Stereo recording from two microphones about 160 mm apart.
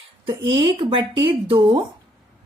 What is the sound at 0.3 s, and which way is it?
Speech, 30° right (ahead or behind).